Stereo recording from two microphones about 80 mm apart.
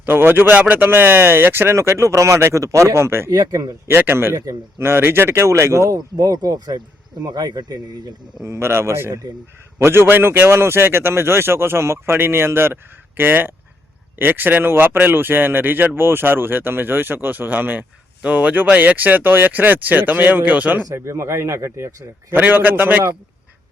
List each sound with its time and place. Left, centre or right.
0.0 s speech: right
3.3 s a man's voice: right
3.8 s a man's voice: right
8.4 s a man's voice: right
20.9 s a man's voice: right
22.4 s speech: right